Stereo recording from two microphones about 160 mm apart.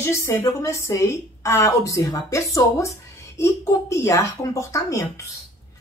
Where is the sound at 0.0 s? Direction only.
15° left (ahead or behind).